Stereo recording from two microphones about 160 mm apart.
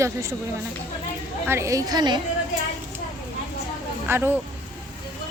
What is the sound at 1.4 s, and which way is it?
Speech, 15° right (ahead or behind).